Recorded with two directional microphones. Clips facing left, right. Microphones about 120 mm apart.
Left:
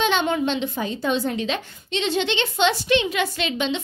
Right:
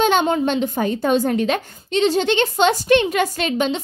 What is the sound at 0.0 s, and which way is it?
A woman's voice, 45° right (ahead or behind).